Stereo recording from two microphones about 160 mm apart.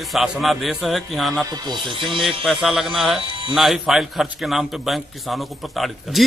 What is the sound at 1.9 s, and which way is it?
Speech, 30° right (ahead or behind).